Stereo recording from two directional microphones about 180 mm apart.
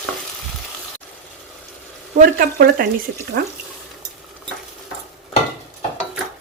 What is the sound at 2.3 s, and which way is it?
Speech, 55° right (ahead or behind).